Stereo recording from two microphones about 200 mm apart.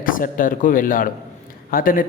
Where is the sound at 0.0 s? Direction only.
45° left (ahead or behind).